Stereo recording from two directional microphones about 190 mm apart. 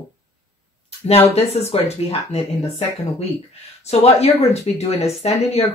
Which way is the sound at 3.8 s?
35° left (ahead or behind).